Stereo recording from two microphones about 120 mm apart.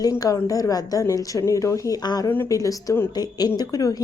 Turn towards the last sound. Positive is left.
turn(degrees=30)  # may be behind; listen again after turning